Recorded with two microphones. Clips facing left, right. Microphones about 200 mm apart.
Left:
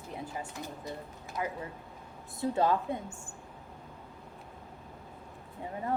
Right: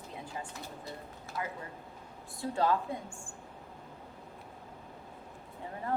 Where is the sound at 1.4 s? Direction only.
20° left (ahead or behind).